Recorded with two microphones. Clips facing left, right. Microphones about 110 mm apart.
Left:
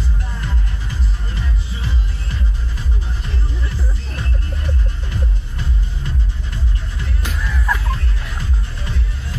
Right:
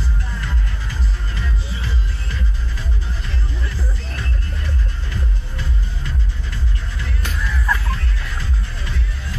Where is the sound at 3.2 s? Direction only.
25° left (ahead or behind).